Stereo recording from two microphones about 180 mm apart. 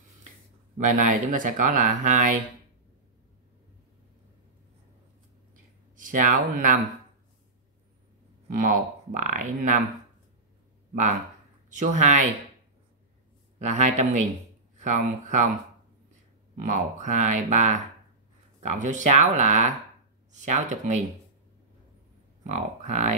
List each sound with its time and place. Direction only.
0.7 s speech: 45° right (ahead or behind)
5.9 s speech: 45° right (ahead or behind)
8.5 s speech: 50° right (ahead or behind)
11.7 s speech: 45° right (ahead or behind)
13.6 s speech: 40° right (ahead or behind)
16.5 s speech: 45° right (ahead or behind)
22.4 s speech: 40° right (ahead or behind)